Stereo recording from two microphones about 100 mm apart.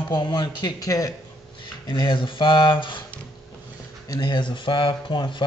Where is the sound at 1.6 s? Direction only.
50° left (ahead or behind).